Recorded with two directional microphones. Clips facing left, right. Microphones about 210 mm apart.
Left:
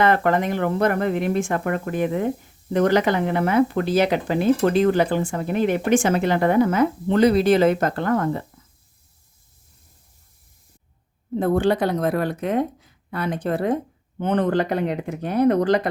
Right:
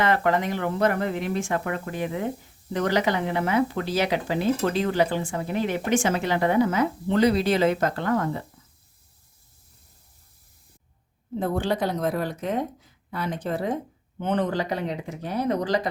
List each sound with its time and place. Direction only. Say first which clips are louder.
0.0 s speech: left 4 dB; 50° left (ahead or behind)
11.3 s speech: left 6 dB; 60° left (ahead or behind)